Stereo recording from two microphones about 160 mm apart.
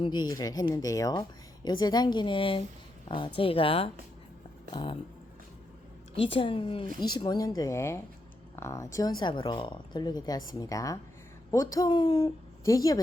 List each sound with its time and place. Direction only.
0.0 s a woman's voice: 25° left (ahead or behind)
6.1 s a woman's voice: 35° left (ahead or behind)